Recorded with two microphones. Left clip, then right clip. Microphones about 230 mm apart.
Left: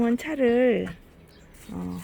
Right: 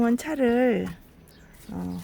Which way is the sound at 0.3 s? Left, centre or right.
Right.